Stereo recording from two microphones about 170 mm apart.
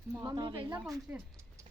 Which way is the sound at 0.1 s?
20° right (ahead or behind).